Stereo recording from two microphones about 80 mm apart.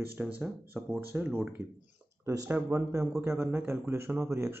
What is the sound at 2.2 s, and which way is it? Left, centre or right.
A man's voice, right.